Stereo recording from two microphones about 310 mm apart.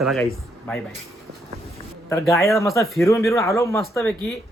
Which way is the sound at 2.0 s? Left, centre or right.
Centre.